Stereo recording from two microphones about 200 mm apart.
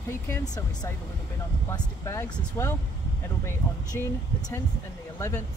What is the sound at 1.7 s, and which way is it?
Speech, 15° left (ahead or behind).